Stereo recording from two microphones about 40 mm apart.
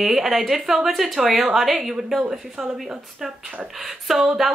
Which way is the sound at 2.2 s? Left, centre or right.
Right.